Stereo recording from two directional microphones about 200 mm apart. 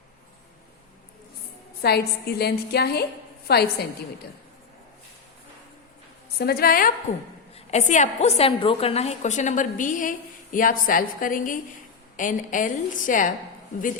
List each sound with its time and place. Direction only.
1.8 s a woman's voice: 55° left (ahead or behind)
6.4 s a woman's voice: 50° left (ahead or behind)
7.5 s a woman's voice: 35° left (ahead or behind)